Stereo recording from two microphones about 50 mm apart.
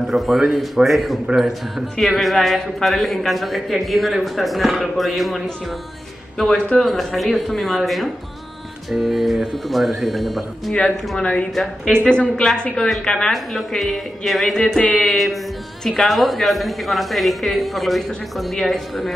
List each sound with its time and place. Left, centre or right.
0.0 s a man's voice: centre
10.7 s speech: centre
11.5 s a man's voice: centre
12.0 s speech: centre
13.3 s a man's voice: centre